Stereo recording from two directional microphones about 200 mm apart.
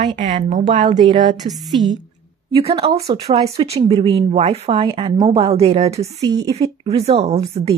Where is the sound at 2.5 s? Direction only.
25° right (ahead or behind).